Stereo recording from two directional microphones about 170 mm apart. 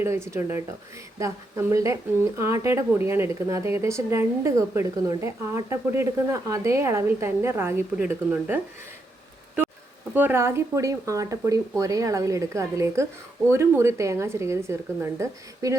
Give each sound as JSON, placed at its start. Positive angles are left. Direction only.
{"t": 0.0, "sound": "speech", "side_deg": -15}
{"t": 10.2, "sound": "speech", "side_deg": -15}